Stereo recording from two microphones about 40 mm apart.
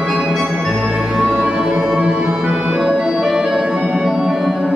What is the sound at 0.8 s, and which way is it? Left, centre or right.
Music, centre.